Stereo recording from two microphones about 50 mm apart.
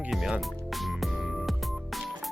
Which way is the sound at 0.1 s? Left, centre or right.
Centre.